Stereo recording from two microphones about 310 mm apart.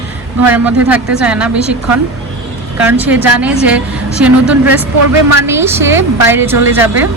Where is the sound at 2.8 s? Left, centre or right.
Centre.